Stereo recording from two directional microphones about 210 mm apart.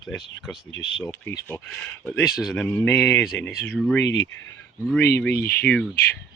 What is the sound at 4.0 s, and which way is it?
Speech, 55° left (ahead or behind).